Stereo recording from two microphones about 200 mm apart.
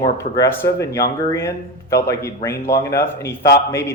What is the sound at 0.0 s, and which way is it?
Speech, 15° left (ahead or behind).